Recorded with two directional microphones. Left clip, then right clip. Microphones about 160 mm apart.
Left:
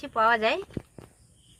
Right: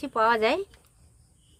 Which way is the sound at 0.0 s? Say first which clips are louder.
Even; 50° right (ahead or behind).